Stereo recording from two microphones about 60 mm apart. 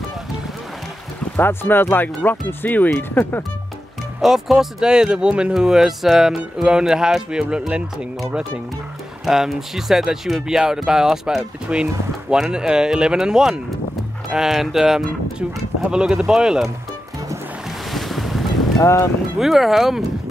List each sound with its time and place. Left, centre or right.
1.3 s speech: left
4.2 s speech: centre
9.2 s speech: centre
17.6 s boat: centre
18.8 s speech: left
19.3 s speech: centre